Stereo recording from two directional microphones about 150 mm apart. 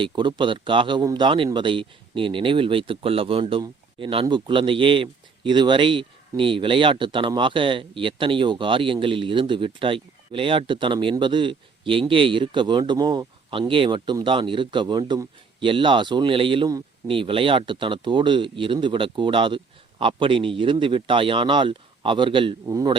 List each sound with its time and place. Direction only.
0.0 s a man's voice: 30° right (ahead or behind)